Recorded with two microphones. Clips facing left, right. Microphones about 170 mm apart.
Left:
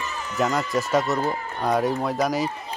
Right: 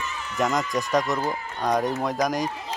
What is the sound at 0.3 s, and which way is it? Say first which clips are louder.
Speech: left 1 dB; centre (ahead or behind).